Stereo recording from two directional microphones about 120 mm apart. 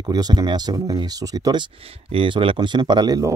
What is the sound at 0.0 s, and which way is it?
Speech, 35° right (ahead or behind).